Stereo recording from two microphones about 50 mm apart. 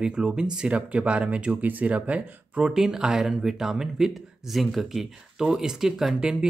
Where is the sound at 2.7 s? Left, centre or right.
Centre.